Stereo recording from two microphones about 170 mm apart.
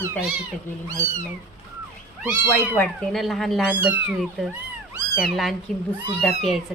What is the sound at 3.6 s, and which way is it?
Speech, 10° right (ahead or behind).